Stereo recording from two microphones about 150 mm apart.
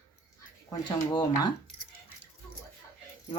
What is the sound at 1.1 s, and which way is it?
Speech, 30° left (ahead or behind).